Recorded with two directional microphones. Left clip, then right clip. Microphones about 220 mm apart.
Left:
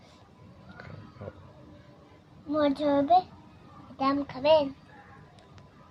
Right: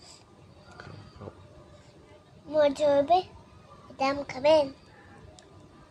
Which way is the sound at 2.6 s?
20° right (ahead or behind).